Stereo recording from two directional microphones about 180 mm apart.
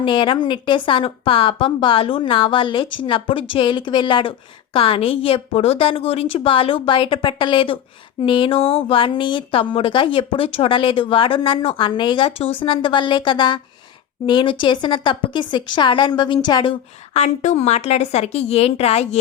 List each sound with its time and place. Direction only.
0.0 s a woman's voice: 25° left (ahead or behind)
17.2 s speech: 40° left (ahead or behind)